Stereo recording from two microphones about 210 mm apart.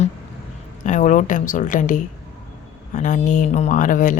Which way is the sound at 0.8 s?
35° left (ahead or behind).